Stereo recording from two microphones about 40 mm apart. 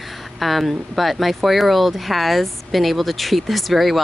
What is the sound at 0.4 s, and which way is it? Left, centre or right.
A woman's voice, centre.